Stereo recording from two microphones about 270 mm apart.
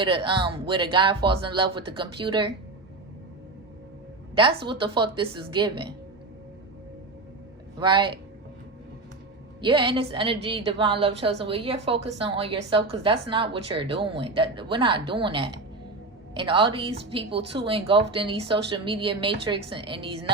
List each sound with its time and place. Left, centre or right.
0.0 s speech: centre
4.4 s a woman's voice: centre
7.8 s speech: centre
9.6 s a woman's voice: centre